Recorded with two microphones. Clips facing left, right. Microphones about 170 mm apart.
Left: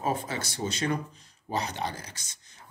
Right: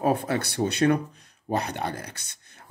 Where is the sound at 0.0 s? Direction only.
60° right (ahead or behind).